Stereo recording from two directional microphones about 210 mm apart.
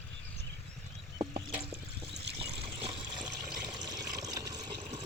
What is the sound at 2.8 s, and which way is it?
Water, 20° right (ahead or behind).